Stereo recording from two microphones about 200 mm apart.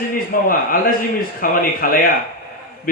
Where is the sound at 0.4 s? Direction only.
45° left (ahead or behind).